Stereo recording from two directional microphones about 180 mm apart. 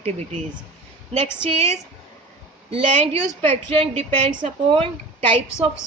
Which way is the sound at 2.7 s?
30° right (ahead or behind).